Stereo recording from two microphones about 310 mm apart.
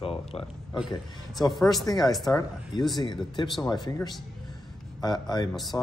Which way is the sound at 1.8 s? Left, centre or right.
Centre.